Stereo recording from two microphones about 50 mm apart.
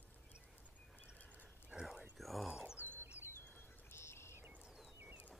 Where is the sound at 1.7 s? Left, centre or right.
Centre.